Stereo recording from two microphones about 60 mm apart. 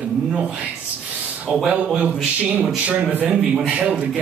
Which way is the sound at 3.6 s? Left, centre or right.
Centre.